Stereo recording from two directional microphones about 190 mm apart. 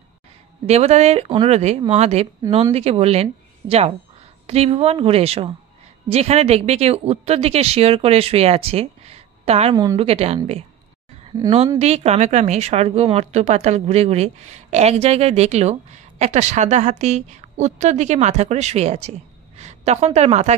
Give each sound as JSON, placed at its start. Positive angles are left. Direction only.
{"t": 0.7, "sound": "a woman's voice", "side_deg": -35}
{"t": 11.8, "sound": "a woman's voice", "side_deg": -35}